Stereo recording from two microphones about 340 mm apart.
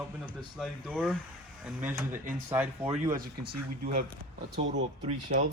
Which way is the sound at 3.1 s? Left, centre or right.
Right.